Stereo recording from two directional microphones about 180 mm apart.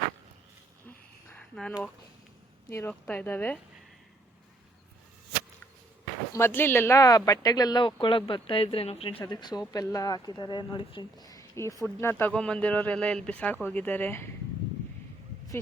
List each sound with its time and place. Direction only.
0.9 s a sound: 10° left (ahead or behind)
2.6 s speech: 15° left (ahead or behind)
6.3 s speech: 15° left (ahead or behind)